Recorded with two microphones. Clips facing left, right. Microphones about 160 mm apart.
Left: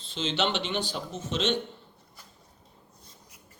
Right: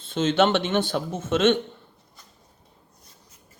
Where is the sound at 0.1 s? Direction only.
50° right (ahead or behind).